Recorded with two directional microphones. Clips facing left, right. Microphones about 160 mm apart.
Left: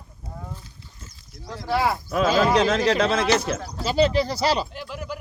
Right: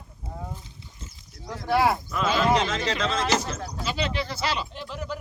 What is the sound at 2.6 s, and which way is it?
Speech, 60° left (ahead or behind).